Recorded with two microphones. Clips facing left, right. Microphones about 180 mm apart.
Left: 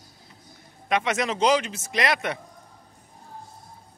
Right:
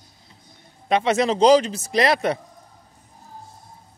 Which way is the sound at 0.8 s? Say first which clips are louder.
Right 5 dB; 30° right (ahead or behind).